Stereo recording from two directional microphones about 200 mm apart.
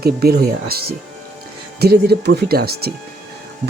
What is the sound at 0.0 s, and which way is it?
Speech, 50° right (ahead or behind).